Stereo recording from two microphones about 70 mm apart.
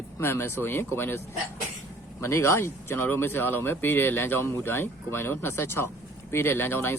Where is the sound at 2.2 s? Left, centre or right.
Left.